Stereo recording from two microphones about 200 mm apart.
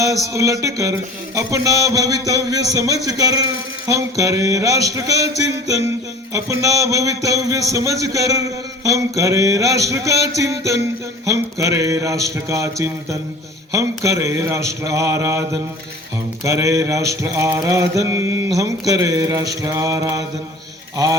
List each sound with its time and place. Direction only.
0.3 s a man's voice: 15° right (ahead or behind)
13.7 s a man's voice: 15° right (ahead or behind)
20.9 s mantra: 15° right (ahead or behind)